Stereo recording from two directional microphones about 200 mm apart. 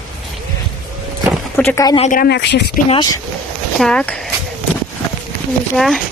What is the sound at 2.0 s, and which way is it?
Speech, 45° left (ahead or behind).